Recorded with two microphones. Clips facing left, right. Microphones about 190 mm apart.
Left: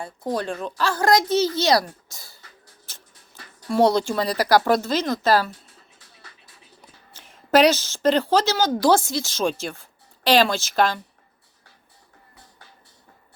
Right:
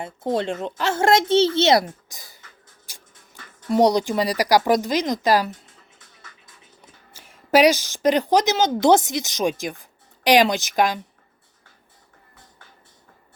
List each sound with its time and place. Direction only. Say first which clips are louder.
0.0 s a woman's voice: right 3 dB; 25° right (ahead or behind)
2.9 s a sound: right 1 dB; 10° right (ahead or behind)
3.7 s speech: right 1 dB; 15° right (ahead or behind)
7.1 s a woman's voice: even; 10° right (ahead or behind)